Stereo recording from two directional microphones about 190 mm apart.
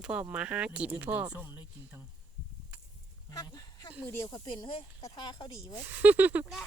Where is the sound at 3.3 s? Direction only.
20° left (ahead or behind).